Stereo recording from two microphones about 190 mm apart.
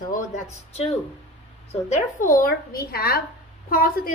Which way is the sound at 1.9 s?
45° left (ahead or behind).